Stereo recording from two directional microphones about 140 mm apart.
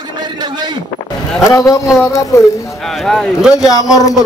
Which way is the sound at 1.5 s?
20° left (ahead or behind).